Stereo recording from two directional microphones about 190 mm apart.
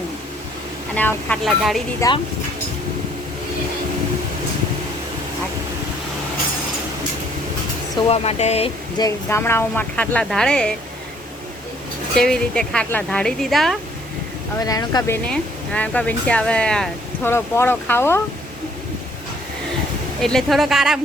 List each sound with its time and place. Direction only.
0.9 s a woman's voice: 5° left (ahead or behind)
2.0 s speech: 20° left (ahead or behind)
8.0 s speech: 30° left (ahead or behind)
9.0 s speech: 15° left (ahead or behind)
12.1 s a woman's voice: 5° left (ahead or behind)
14.6 s speech: 20° left (ahead or behind)
20.2 s a woman's voice: centre (ahead or behind)